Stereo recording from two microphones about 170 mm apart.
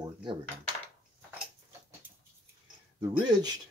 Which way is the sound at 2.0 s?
10° right (ahead or behind).